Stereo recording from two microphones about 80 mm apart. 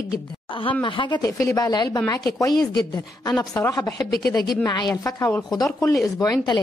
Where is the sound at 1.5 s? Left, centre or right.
Left.